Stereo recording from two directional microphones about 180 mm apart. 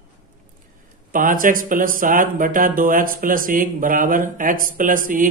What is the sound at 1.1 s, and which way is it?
Speech, 50° right (ahead or behind).